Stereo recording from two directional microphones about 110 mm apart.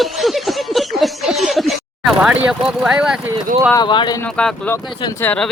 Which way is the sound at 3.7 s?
45° left (ahead or behind).